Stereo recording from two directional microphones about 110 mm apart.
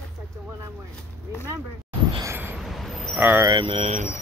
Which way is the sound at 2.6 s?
Centre (ahead or behind).